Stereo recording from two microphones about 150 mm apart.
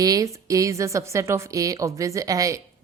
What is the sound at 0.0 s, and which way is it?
A woman's voice, 25° right (ahead or behind).